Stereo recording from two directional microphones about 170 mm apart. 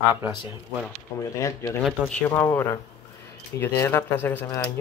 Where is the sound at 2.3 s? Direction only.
15° left (ahead or behind).